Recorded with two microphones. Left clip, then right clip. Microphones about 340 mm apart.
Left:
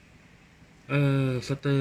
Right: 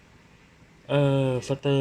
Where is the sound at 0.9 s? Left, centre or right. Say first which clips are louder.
Right 5 dB; right.